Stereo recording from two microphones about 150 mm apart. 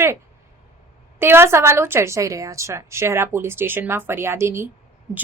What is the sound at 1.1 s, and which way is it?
Speech, 15° right (ahead or behind).